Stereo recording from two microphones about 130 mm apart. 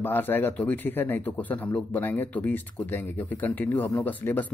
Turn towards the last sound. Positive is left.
turn(degrees=15)  # may be behind; listen again after turning